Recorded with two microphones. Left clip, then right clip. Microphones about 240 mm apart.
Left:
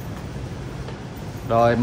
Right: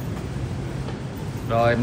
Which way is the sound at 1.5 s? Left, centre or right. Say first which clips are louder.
Left 3 dB; centre.